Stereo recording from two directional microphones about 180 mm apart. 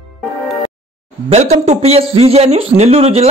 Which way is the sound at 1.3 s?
40° right (ahead or behind).